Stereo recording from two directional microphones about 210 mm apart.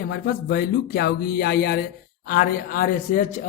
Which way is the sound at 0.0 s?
50° left (ahead or behind).